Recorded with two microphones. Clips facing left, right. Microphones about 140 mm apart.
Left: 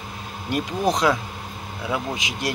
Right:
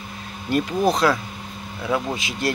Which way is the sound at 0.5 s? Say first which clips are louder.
Right 3 dB; 15° left (ahead or behind).